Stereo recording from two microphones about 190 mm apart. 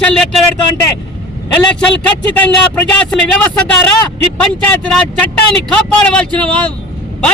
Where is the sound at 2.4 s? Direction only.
10° left (ahead or behind).